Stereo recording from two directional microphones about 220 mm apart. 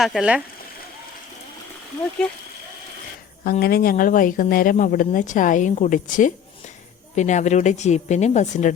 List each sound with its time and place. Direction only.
0.0 s speech: 5° right (ahead or behind)
3.4 s speech: 45° left (ahead or behind)